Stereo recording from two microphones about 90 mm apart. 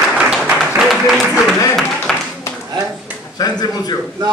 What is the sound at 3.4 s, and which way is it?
Speech, 50° left (ahead or behind).